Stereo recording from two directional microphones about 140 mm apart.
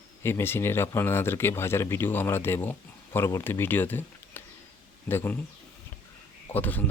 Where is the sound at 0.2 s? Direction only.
20° left (ahead or behind).